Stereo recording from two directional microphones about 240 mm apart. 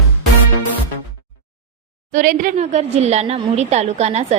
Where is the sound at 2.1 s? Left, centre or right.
Right.